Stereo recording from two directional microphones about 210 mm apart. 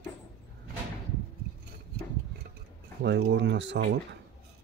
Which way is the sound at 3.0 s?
55° right (ahead or behind).